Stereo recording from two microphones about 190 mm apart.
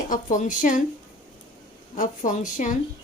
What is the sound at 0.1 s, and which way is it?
Speech, 45° left (ahead or behind).